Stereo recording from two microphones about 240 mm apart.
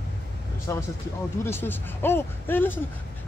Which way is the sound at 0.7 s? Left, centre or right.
Centre.